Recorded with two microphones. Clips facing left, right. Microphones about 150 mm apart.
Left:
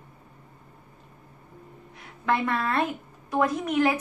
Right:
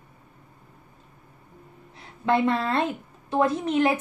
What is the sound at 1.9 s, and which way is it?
A woman's voice, 25° right (ahead or behind).